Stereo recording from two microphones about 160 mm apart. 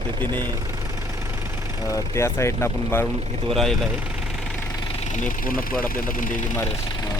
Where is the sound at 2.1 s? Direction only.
15° left (ahead or behind).